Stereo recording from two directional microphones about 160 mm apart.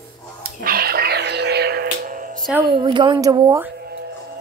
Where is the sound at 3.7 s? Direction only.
80° right.